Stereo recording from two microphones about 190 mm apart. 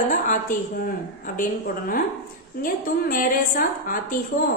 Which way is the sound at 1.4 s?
45° left (ahead or behind).